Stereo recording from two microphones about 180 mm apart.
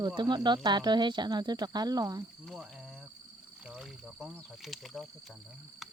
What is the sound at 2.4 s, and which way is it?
Speech, centre (ahead or behind).